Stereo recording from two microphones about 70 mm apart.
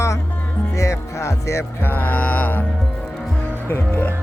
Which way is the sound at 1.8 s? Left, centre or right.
Left.